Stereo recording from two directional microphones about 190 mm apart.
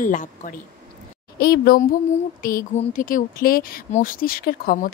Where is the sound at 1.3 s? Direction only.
55° left (ahead or behind).